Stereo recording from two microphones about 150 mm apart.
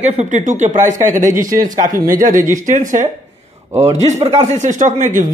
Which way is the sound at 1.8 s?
65° right (ahead or behind).